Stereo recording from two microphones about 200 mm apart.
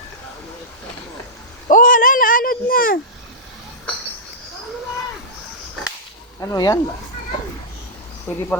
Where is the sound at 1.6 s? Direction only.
40° left (ahead or behind).